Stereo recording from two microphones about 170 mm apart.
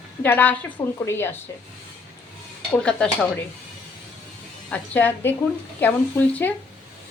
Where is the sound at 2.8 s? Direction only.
5° left (ahead or behind).